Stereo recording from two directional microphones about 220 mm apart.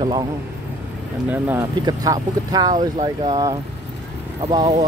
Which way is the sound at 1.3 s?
10° right (ahead or behind).